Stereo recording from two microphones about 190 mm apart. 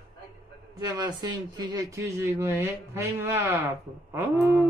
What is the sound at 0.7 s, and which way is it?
Speech, 20° right (ahead or behind).